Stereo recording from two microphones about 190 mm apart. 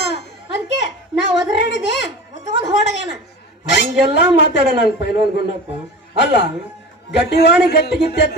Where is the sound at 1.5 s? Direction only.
65° left (ahead or behind).